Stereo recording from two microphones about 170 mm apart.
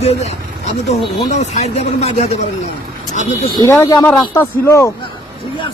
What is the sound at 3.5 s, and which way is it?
Speech, 20° left (ahead or behind).